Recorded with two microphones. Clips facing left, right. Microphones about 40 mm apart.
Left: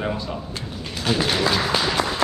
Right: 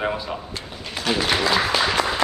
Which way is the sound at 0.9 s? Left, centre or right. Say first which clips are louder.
Right 1 dB; centre.